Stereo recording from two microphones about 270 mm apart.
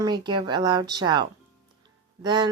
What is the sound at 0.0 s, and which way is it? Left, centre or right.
Speech, centre.